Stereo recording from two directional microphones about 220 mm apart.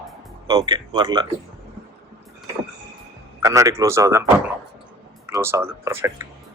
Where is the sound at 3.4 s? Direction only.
15° right (ahead or behind).